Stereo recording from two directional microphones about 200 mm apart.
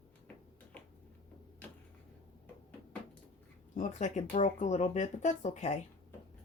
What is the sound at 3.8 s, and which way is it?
Speech, 35° left (ahead or behind).